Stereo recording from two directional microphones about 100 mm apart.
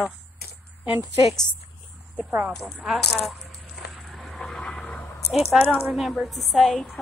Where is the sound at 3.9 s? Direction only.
Centre (ahead or behind).